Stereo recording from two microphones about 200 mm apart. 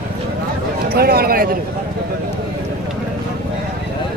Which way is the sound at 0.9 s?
50° right (ahead or behind).